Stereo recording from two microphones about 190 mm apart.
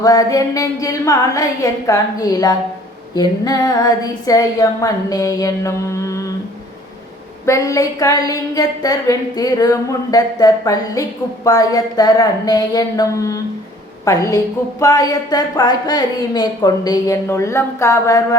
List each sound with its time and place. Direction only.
0.0 s speech: 20° left (ahead or behind)
7.4 s a woman's voice: 15° left (ahead or behind)